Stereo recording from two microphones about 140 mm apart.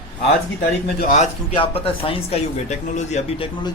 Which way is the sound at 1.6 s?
40° left (ahead or behind).